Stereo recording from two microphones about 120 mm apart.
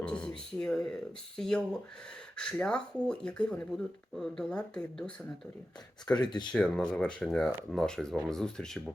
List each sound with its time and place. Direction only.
0.0 s speech: 10° left (ahead or behind)
6.1 s speech: 35° left (ahead or behind)
6.5 s speech: 5° left (ahead or behind)